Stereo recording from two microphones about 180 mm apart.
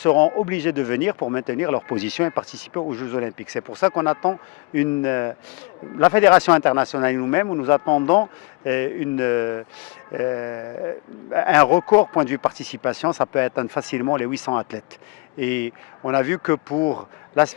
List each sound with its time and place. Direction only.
0.4 s speech: 10° left (ahead or behind)
2.3 s speech: 25° left (ahead or behind)
15.4 s speech: 10° left (ahead or behind)
16.7 s speech: 30° left (ahead or behind)